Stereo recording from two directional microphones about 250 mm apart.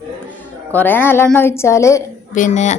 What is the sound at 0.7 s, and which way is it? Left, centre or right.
A woman's voice, centre.